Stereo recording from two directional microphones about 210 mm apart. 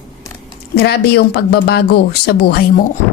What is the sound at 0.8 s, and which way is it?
Speech, 50° left (ahead or behind).